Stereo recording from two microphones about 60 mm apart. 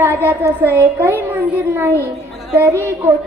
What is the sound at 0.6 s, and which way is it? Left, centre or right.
Speech, right.